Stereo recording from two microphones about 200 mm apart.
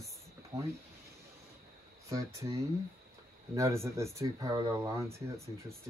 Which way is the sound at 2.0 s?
15° right (ahead or behind).